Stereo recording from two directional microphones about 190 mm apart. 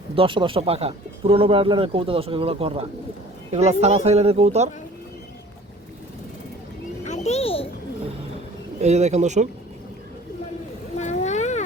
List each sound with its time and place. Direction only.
0.2 s speech: 25° right (ahead or behind)
7.0 s a sound: 35° left (ahead or behind)
8.8 s speech: 35° right (ahead or behind)
10.9 s boat: 35° left (ahead or behind)